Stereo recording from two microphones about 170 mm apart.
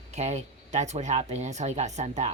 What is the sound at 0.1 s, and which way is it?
Speech, 40° right (ahead or behind).